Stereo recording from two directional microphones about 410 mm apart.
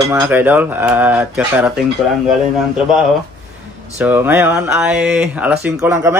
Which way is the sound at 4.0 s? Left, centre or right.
Centre.